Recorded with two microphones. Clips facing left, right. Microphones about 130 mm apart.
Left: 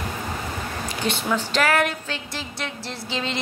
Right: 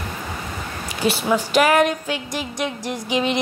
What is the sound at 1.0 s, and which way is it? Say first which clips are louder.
Music: right 5 dB; 10° right (ahead or behind).